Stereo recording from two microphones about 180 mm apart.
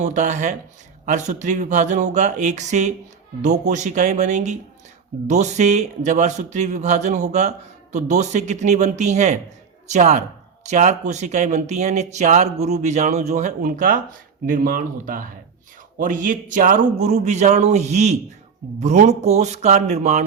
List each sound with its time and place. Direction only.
0.0 s speech: 40° right (ahead or behind)